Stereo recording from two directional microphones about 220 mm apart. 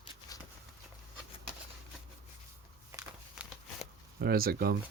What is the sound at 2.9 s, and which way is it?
Walk, 10° right (ahead or behind).